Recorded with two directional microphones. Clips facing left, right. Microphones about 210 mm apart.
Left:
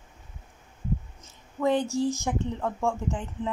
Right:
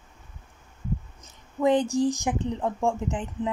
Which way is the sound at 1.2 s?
15° right (ahead or behind).